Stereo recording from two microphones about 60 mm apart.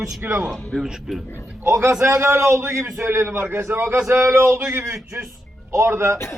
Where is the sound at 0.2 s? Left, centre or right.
Right.